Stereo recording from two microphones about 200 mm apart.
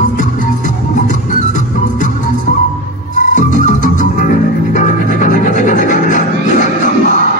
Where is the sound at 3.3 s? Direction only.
40° left (ahead or behind).